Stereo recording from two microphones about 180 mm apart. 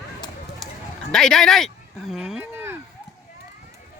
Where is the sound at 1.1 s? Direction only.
5° left (ahead or behind).